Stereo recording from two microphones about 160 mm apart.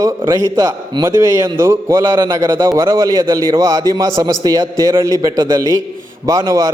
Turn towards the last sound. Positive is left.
turn(degrees=-20)  # may be behind; listen again after turning